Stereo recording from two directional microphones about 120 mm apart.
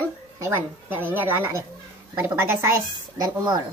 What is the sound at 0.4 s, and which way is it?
A woman's voice, 15° right (ahead or behind).